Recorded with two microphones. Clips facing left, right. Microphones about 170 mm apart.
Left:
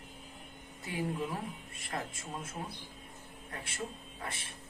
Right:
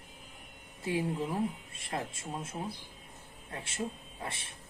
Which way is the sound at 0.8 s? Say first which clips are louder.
Right 3 dB; 25° right (ahead or behind).